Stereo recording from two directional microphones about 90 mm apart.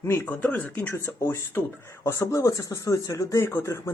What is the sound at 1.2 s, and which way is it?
Speech, 30° left (ahead or behind).